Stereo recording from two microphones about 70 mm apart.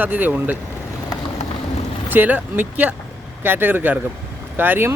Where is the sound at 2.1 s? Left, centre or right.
Right.